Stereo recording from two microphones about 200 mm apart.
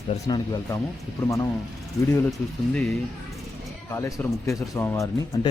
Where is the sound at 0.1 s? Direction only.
20° left (ahead or behind).